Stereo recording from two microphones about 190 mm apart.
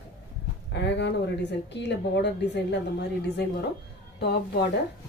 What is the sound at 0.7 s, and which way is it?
A woman's voice, 65° left (ahead or behind).